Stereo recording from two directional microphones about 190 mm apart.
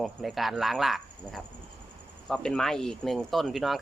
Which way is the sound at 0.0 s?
Centre (ahead or behind).